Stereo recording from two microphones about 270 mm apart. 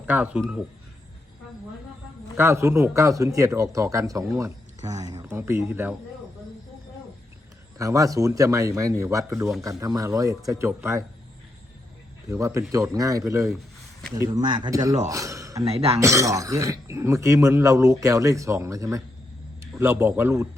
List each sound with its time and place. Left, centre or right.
0.0 s speech: centre
2.3 s speech: centre
7.8 s speech: centre
12.3 s speech: centre
15.6 s speech: right
16.0 s a man's voice: centre